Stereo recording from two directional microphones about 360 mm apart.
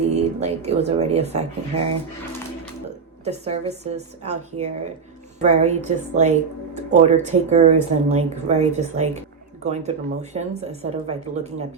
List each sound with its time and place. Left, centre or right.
0.1 s speech: centre
3.2 s a woman's voice: centre